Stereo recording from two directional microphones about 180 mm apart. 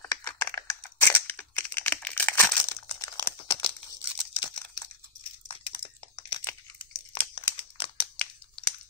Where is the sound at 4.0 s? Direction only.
25° left (ahead or behind).